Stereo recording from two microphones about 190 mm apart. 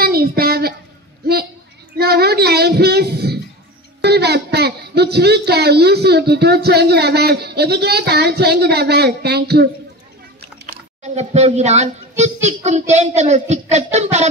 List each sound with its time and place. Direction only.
0.0 s a sound: 55° right (ahead or behind)
2.0 s child singing: 55° right (ahead or behind)
4.0 s speech: 60° right (ahead or behind)
11.1 s a child's voice: 35° right (ahead or behind)